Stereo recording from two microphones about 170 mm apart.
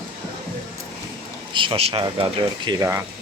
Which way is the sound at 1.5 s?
30° right (ahead or behind).